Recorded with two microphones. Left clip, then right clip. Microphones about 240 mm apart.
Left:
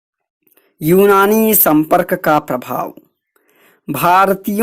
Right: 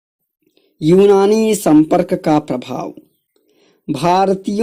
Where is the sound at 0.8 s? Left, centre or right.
Left.